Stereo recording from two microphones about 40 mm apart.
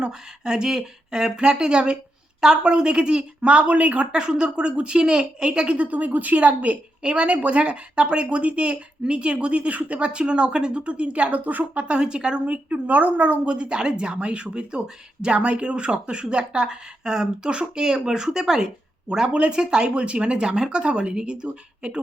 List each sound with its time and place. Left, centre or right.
0.0 s speech: centre; by 4.1 s right
4.1 s speech: right
12.5 s speech: right